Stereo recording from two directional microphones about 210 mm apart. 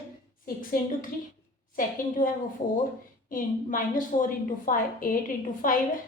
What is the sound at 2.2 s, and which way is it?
A woman's voice, 40° left (ahead or behind).